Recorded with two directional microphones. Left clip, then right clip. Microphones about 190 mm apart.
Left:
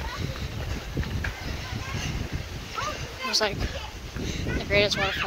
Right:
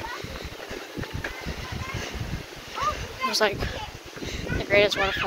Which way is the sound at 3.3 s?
35° right (ahead or behind).